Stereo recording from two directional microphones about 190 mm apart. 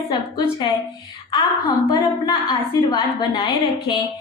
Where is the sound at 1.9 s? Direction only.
20° left (ahead or behind).